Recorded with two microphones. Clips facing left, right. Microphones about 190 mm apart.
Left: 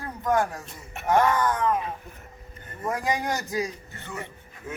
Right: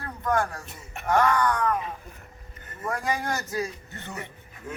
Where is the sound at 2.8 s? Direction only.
20° left (ahead or behind).